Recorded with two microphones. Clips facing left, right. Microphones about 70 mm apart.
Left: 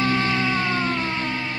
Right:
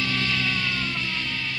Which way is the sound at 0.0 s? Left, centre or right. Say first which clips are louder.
Left 5 dB; left.